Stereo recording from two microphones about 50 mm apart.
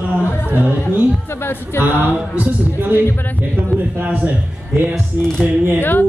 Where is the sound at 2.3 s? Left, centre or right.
Right.